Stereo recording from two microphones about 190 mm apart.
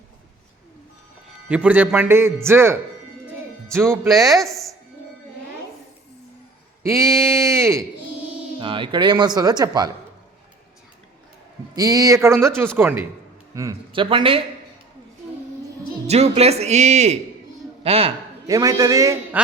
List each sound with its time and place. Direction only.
1.5 s speech: 5° right (ahead or behind)
4.1 s speech: centre (ahead or behind)
6.8 s speech: 15° right (ahead or behind)
8.5 s speech: 25° right (ahead or behind)
11.7 s speech: 20° right (ahead or behind)
16.0 s speech: 35° right (ahead or behind)
18.4 s speech: 20° right (ahead or behind)